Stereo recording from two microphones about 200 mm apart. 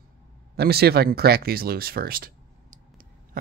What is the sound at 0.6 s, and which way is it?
Speech, 55° right (ahead or behind).